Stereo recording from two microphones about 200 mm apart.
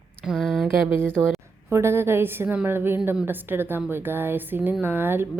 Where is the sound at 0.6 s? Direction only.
10° right (ahead or behind).